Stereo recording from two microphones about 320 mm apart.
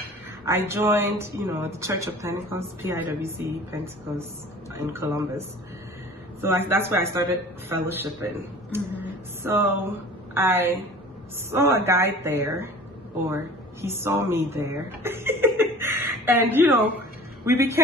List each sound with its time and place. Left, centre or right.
0.5 s a woman's voice: centre
4.7 s a woman's voice: centre
6.4 s a woman's voice: centre